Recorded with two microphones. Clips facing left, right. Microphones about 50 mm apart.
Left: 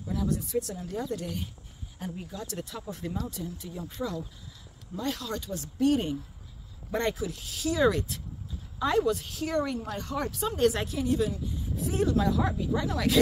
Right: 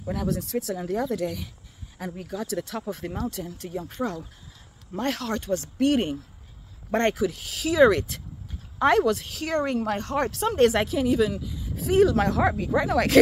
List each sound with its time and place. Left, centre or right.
0.1 s speech: right
2.9 s speech: right
9.6 s speech: right